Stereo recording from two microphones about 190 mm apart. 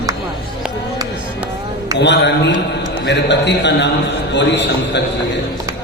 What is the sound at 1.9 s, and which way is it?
A man's voice, 65° left (ahead or behind).